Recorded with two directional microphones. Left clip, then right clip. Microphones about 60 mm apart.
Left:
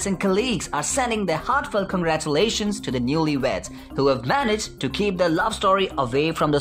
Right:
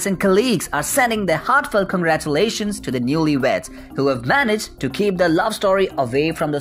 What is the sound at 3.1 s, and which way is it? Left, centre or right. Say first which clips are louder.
Speech: right 5 dB; right.